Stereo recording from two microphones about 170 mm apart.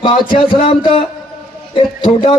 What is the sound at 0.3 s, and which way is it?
Speech, 30° left (ahead or behind).